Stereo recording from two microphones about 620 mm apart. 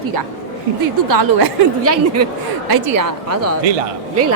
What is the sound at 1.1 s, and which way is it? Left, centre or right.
Speech, right.